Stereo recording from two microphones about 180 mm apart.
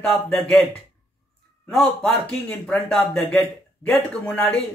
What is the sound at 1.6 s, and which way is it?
A man's voice, 5° left (ahead or behind).